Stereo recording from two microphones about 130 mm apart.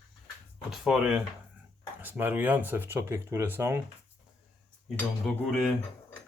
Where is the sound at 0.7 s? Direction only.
5° right (ahead or behind).